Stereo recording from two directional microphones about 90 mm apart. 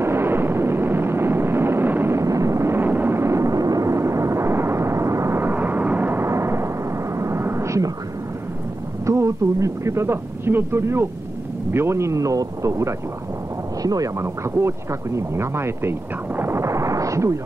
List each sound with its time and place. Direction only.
0.0 s a sound: 25° right (ahead or behind)
7.2 s vehicle: 30° right (ahead or behind)
9.0 s speech: 35° right (ahead or behind)